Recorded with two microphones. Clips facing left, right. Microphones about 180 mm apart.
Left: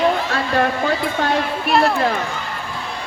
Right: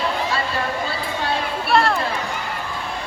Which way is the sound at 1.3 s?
10° left (ahead or behind).